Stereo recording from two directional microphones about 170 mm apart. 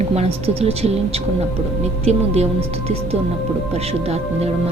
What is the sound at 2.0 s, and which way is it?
Speech, 40° right (ahead or behind).